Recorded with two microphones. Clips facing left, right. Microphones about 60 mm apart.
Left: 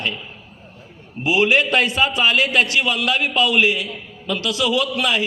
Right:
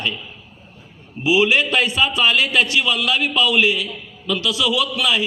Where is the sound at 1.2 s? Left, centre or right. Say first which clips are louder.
Even; left.